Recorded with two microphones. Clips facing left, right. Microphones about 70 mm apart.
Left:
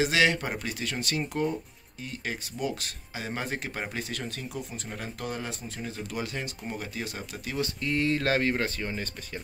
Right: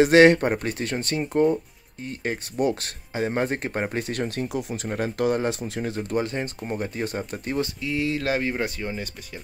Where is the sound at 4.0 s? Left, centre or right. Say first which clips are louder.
Right 8 dB; right.